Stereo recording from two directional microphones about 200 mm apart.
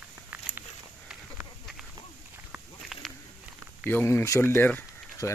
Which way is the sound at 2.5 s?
Centre (ahead or behind).